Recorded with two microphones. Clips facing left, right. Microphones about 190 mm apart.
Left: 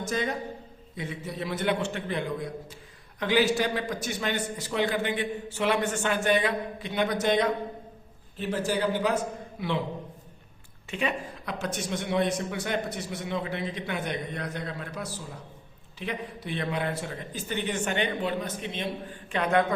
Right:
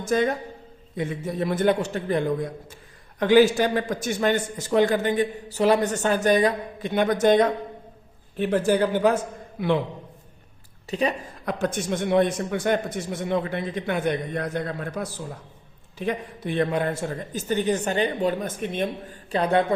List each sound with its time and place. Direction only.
0.1 s a man's voice: 50° right (ahead or behind)
10.8 s a man's voice: 40° right (ahead or behind)